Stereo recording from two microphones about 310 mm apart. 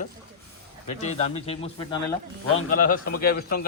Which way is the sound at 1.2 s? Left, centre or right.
Centre.